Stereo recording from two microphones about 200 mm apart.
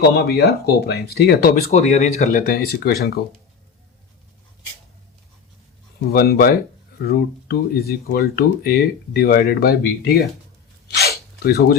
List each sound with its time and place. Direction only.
0.1 s speech: 55° left (ahead or behind)
1.7 s speech: 35° left (ahead or behind)
2.3 s speech: 50° left (ahead or behind)
6.1 s speech: 50° left (ahead or behind)
10.8 s sneeze: 55° left (ahead or behind)